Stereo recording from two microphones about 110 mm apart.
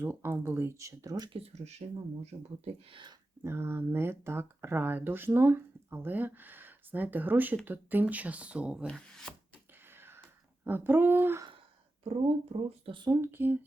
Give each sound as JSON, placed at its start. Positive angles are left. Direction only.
{"t": 0.0, "sound": "speech", "side_deg": -15}
{"t": 1.3, "sound": "speech", "side_deg": -70}
{"t": 2.9, "sound": "speech", "side_deg": -45}
{"t": 3.4, "sound": "speech", "side_deg": -25}
{"t": 8.9, "sound": "speech", "side_deg": 5}
{"t": 9.9, "sound": "a sound", "side_deg": -20}
{"t": 12.5, "sound": "speech", "side_deg": -50}
{"t": 13.1, "sound": "speech", "side_deg": -20}